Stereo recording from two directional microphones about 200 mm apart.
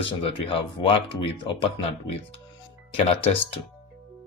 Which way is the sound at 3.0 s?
30° left (ahead or behind).